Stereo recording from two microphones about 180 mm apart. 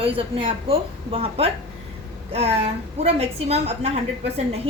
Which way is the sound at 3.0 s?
35° right (ahead or behind).